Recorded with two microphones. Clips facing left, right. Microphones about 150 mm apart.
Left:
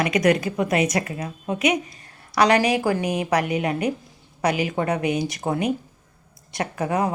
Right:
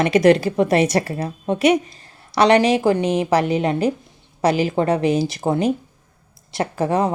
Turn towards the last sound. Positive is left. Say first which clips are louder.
# right 4 dB
turn(degrees=-30)  # may be behind; listen again after turning